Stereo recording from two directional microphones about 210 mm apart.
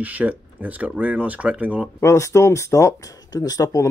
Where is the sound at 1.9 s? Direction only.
15° left (ahead or behind).